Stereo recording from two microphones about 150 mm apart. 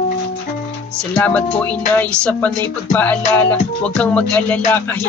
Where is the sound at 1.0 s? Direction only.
10° left (ahead or behind).